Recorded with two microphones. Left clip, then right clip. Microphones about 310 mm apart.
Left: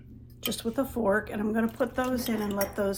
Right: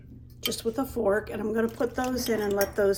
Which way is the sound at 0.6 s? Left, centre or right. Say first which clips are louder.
Right 1 dB; centre.